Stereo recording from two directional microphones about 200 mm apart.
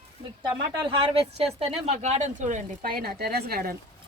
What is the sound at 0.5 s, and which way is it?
Speech, 25° right (ahead or behind).